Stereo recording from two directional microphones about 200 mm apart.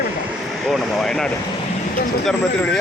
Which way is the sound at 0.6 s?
Centre (ahead or behind).